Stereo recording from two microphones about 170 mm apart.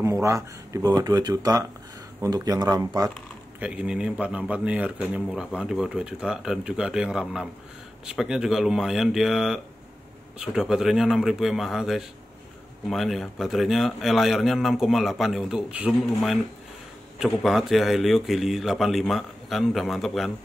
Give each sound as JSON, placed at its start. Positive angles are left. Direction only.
{"t": 0.0, "sound": "speech", "side_deg": -20}
{"t": 3.2, "sound": "speech", "side_deg": -5}